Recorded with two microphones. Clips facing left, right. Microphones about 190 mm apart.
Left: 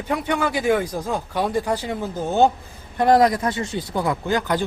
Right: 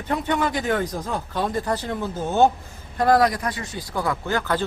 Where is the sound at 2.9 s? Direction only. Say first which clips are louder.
Left 2 dB; 25° left (ahead or behind).